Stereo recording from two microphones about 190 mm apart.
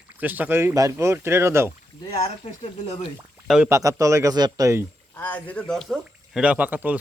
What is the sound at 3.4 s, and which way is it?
Speech, centre (ahead or behind).